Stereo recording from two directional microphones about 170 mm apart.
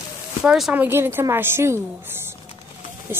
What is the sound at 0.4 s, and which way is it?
Speech, 5° right (ahead or behind).